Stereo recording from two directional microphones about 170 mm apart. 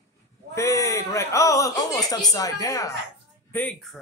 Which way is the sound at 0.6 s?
20° left (ahead or behind).